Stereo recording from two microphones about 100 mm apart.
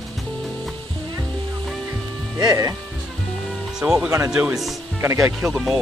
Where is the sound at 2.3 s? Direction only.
35° right (ahead or behind).